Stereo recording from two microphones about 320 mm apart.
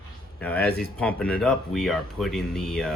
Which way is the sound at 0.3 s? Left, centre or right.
Centre.